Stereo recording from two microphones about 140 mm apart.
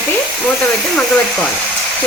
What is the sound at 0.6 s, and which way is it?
Speech, 10° left (ahead or behind).